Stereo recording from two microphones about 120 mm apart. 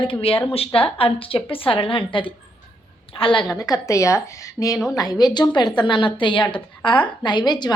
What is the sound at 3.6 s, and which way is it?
Speech, 30° left (ahead or behind).